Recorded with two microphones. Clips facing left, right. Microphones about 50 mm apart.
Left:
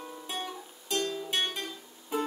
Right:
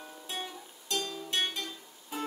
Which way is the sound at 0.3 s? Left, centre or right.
Centre.